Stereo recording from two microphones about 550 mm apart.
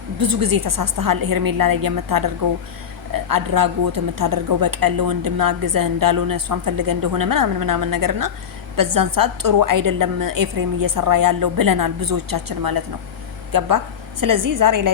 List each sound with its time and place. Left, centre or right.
0.2 s a woman's voice: right